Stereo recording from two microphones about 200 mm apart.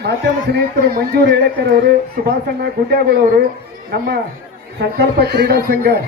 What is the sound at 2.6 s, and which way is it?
A man's voice, 50° right (ahead or behind).